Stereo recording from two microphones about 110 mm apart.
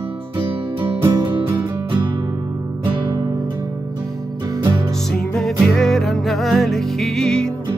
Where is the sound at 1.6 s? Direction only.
45° right (ahead or behind).